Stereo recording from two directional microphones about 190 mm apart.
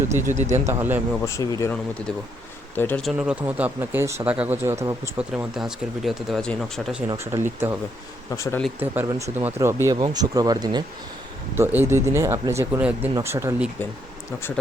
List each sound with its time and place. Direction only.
0.3 s speech: 35° right (ahead or behind)
0.7 s speech: 10° right (ahead or behind)
1.2 s speech: 15° left (ahead or behind)
2.7 s speech: 10° left (ahead or behind); by 5.2 s 15° right (ahead or behind)
5.3 s speech: 5° right (ahead or behind)
7.1 s speech: 15° right (ahead or behind)
8.3 s speech: 15° left (ahead or behind)
8.8 s speech: 15° right (ahead or behind)
11.5 s speech: 10° right (ahead or behind)